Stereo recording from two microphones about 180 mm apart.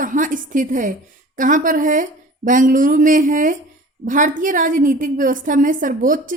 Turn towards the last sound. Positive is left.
turn(degrees=-45)  # may be behind; listen again after turning